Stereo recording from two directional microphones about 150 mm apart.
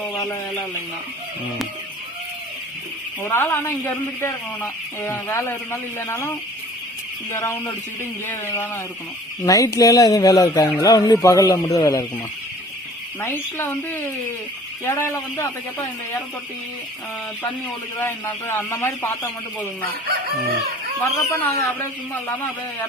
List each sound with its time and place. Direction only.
3.2 s speech: 15° left (ahead or behind)
13.2 s speech: 15° left (ahead or behind)
17.9 s speech: 15° left (ahead or behind)
21.0 s speech: 20° left (ahead or behind)